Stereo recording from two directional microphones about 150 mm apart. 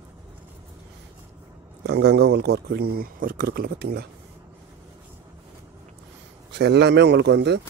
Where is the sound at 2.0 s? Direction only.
90° right.